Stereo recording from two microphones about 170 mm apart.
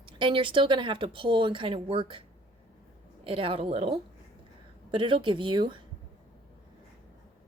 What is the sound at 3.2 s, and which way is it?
A woman's voice, 30° right (ahead or behind).